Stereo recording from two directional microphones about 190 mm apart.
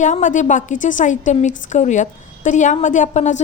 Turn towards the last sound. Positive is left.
turn(degrees=40)  # may be behind; listen again after turning